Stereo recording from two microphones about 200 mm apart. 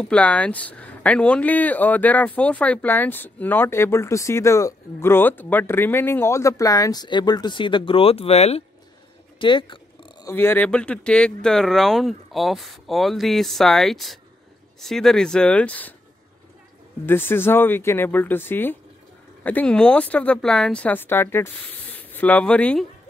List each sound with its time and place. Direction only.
0.0 s speech: 5° left (ahead or behind); by 9.8 s 25° left (ahead or behind)
10.2 s speech: 10° left (ahead or behind)
17.0 s speech: 10° left (ahead or behind)